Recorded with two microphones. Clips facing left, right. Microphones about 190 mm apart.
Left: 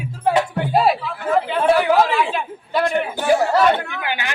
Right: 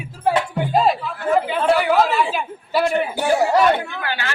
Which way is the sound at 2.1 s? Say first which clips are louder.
Even; 5° right (ahead or behind).